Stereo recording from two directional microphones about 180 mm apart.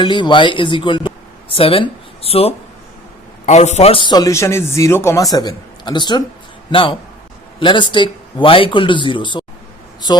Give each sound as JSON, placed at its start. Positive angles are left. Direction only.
{"t": 0.0, "sound": "a man's voice", "side_deg": 25}